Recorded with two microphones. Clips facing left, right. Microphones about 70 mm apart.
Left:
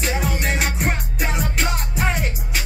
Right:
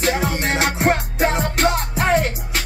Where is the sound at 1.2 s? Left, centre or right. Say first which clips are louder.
Right 6 dB; right.